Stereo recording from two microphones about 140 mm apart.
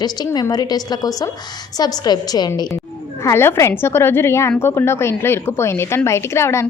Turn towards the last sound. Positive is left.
turn(degrees=20)  # may be behind; listen again after turning